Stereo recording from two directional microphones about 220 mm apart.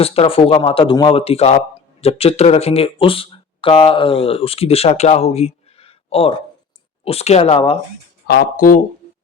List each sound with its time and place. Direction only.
0.0 s speech: 25° left (ahead or behind)
8.3 s speech: 45° left (ahead or behind)